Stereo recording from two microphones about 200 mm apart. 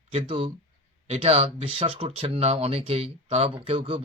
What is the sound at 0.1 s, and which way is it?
Speech, 25° right (ahead or behind).